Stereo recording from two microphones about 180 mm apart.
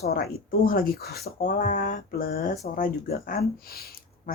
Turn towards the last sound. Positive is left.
turn(degrees=60)  # may be behind; listen again after turning